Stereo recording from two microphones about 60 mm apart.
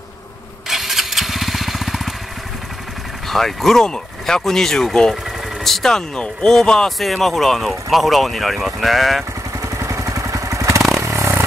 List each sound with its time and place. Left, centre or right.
0.7 s motorcycle: centre
3.3 s speech: centre
9.6 s motorcycle: right